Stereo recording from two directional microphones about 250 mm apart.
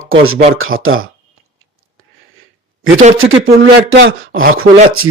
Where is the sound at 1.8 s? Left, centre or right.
Right.